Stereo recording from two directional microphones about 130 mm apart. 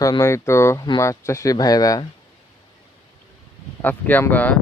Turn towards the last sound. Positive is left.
turn(degrees=10)  # may be behind; listen again after turning